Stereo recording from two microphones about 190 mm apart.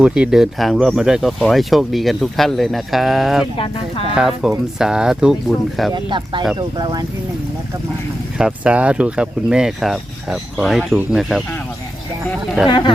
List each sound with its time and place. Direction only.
0.0 s speech: 5° right (ahead or behind)
5.9 s speech: 25° right (ahead or behind)
8.4 s speech: 5° right (ahead or behind)
12.6 s speech: 25° left (ahead or behind)